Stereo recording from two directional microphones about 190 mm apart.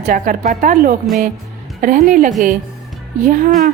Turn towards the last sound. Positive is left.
turn(degrees=-45)  # may be behind; listen again after turning